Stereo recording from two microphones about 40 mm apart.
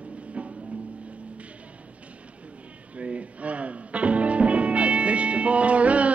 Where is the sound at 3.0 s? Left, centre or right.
Right.